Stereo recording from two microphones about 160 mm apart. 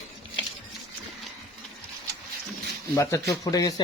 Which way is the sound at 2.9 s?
20° left (ahead or behind).